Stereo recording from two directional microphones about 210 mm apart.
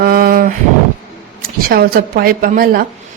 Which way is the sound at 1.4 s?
45° right (ahead or behind).